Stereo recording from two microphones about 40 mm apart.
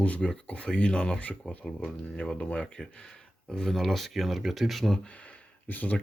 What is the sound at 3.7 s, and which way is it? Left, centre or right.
Speech, centre.